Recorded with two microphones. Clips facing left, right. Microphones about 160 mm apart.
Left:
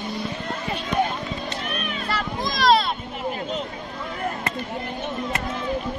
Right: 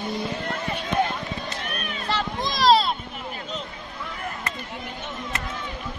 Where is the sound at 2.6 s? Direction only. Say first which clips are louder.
Even; 30° right (ahead or behind).